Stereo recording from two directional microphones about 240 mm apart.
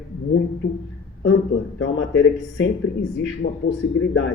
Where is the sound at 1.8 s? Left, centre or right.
Left.